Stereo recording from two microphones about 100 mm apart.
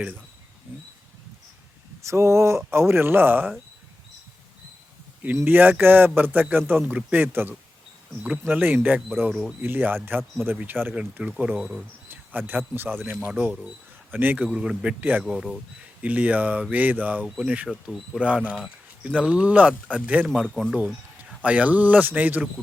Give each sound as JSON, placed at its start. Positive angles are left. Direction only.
{"t": 2.0, "sound": "speech", "side_deg": -30}
{"t": 5.4, "sound": "speech", "side_deg": -20}
{"t": 9.3, "sound": "speech", "side_deg": -5}
{"t": 9.6, "sound": "speech", "side_deg": -20}
{"t": 16.0, "sound": "speech", "side_deg": -15}
{"t": 17.2, "sound": "speech", "side_deg": -5}
{"t": 20.2, "sound": "speech", "side_deg": -5}
{"t": 21.4, "sound": "speech", "side_deg": -15}